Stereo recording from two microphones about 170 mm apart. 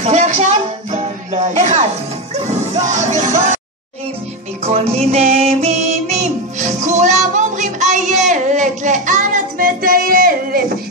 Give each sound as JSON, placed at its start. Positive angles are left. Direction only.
{"t": 0.0, "sound": "music", "side_deg": -45}
{"t": 4.6, "sound": "music", "side_deg": -40}